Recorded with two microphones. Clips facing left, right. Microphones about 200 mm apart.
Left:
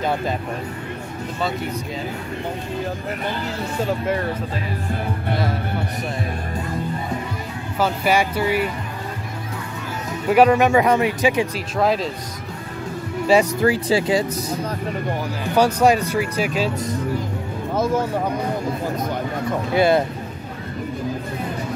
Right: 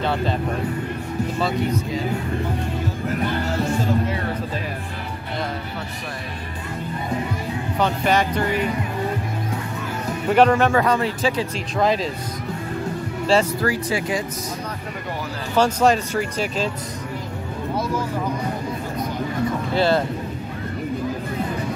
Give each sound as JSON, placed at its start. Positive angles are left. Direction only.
{"t": 7.8, "sound": "speech", "side_deg": 10}
{"t": 10.3, "sound": "speech", "side_deg": 10}
{"t": 11.8, "sound": "speech", "side_deg": 0}
{"t": 13.3, "sound": "speech", "side_deg": 15}
{"t": 13.7, "sound": "speech", "side_deg": 30}
{"t": 15.5, "sound": "speech", "side_deg": 10}
{"t": 19.7, "sound": "speech", "side_deg": 15}